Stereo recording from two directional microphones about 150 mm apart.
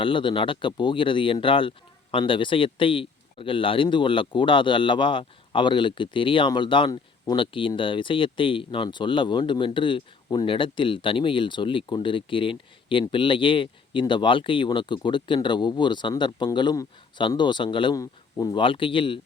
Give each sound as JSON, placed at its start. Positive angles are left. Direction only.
{"t": 0.0, "sound": "speech", "side_deg": 35}